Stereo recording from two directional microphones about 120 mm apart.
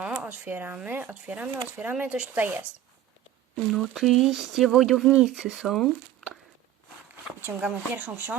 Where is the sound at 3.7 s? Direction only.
Centre (ahead or behind).